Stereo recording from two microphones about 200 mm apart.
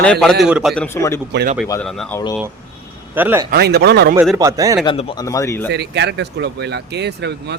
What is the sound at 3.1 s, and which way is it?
Speech, 10° right (ahead or behind).